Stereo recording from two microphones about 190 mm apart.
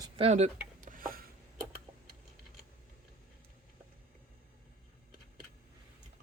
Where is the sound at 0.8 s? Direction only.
45° right (ahead or behind).